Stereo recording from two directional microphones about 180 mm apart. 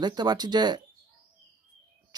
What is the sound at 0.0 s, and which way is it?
Speech, 25° right (ahead or behind).